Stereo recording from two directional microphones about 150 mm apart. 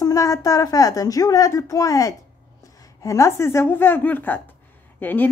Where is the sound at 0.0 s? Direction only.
20° left (ahead or behind).